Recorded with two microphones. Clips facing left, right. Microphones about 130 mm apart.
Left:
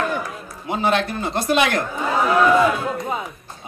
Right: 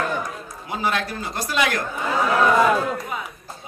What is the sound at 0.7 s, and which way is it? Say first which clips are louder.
Speech: left 5 dB; 25° left (ahead or behind).